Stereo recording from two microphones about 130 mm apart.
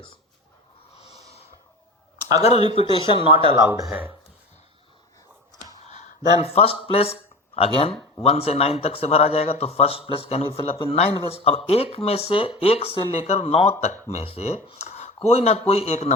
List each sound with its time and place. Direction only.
0.9 s snort: 55° left (ahead or behind)
2.4 s speech: 55° left (ahead or behind)
3.8 s speech: 10° right (ahead or behind)
5.8 s speech: 60° left (ahead or behind)